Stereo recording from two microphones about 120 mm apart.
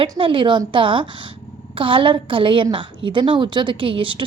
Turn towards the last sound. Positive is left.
turn(degrees=-45)  # may be behind; listen again after turning